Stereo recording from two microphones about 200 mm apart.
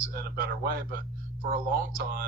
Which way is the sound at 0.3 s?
50° right (ahead or behind).